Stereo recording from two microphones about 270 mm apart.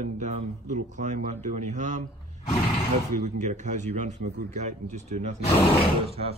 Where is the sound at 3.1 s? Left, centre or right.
Right.